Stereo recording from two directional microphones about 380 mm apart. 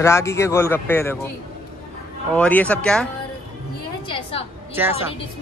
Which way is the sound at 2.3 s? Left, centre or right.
Centre.